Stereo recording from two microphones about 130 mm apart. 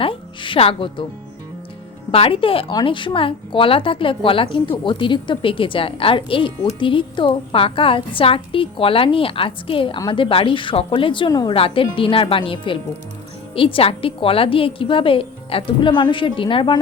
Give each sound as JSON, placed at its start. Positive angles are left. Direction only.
{"t": 0.0, "sound": "a woman's voice", "side_deg": 40}
{"t": 2.1, "sound": "a woman's voice", "side_deg": 45}